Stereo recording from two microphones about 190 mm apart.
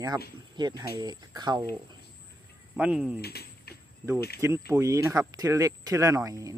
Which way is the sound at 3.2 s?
55° left (ahead or behind).